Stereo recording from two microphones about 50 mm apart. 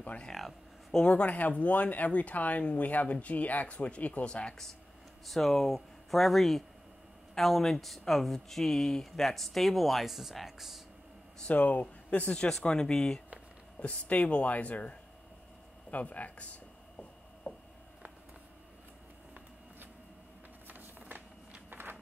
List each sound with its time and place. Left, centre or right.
0.0 s speech: left
0.3 s speech: centre
1.0 s speech: left
5.2 s speech: centre
11.4 s speech: left
12.4 s speech: centre
13.7 s speech: left
17.4 s a sound: left
20.6 s a sound: right
21.1 s walk: right